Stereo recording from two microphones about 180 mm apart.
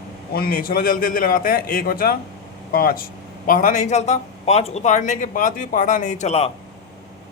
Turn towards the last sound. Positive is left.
turn(degrees=35)  # may be behind; listen again after turning